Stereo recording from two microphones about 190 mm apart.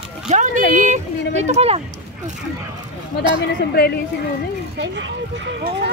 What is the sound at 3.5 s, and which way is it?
Speech, 55° left (ahead or behind).